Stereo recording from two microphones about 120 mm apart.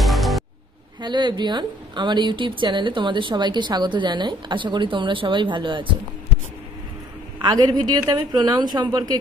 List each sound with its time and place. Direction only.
0.0 s music: centre (ahead or behind)
1.0 s a woman's voice: 40° right (ahead or behind)
7.4 s a woman's voice: 35° right (ahead or behind)